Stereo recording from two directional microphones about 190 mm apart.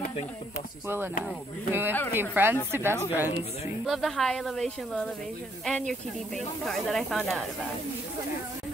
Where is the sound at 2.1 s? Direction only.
10° right (ahead or behind).